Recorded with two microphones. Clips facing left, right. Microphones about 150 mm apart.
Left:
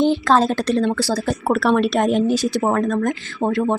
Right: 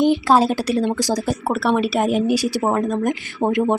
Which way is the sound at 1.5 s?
Centre (ahead or behind).